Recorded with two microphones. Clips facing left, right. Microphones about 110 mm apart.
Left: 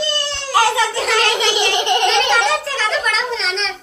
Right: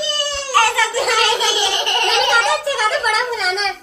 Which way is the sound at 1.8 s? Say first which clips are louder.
Left 2 dB; 15° left (ahead or behind).